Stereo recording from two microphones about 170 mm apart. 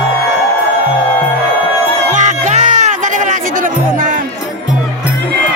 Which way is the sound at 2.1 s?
45° right (ahead or behind).